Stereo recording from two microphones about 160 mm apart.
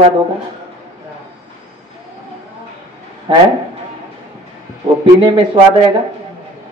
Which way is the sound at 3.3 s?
35° right (ahead or behind).